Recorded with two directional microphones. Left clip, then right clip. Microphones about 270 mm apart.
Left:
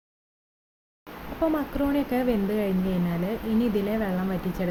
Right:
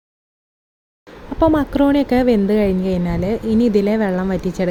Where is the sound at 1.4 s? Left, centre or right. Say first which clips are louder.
Right 11 dB; right.